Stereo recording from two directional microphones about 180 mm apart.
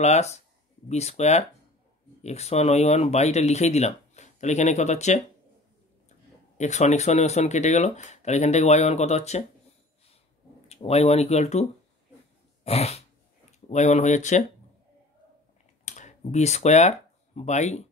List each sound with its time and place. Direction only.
0.0 s speech: 40° left (ahead or behind)
6.6 s speech: 40° left (ahead or behind)
10.7 s speech: 35° left (ahead or behind)
12.6 s speech: 35° left (ahead or behind)
15.8 s a sound: 40° left (ahead or behind)
17.4 s speech: 40° left (ahead or behind)